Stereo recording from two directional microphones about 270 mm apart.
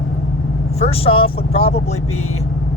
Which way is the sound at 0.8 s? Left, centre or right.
Left.